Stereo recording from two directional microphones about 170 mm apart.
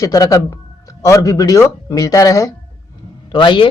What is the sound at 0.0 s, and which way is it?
Speech, 20° left (ahead or behind).